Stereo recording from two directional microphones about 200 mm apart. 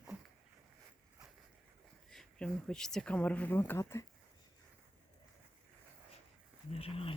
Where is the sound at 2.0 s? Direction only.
Centre (ahead or behind).